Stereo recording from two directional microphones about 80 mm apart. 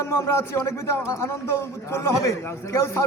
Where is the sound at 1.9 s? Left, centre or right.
Left.